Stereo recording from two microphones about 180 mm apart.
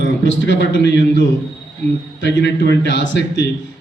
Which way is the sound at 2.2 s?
75° left (ahead or behind).